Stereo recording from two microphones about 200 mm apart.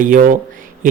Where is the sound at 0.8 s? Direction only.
45° right (ahead or behind).